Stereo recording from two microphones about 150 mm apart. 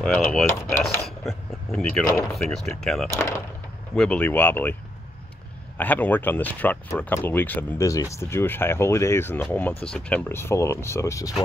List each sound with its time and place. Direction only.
0.0 s speech: 5° left (ahead or behind)
3.2 s speech: 20° left (ahead or behind)
3.9 s speech: 5° left (ahead or behind)
5.8 s speech: 10° left (ahead or behind)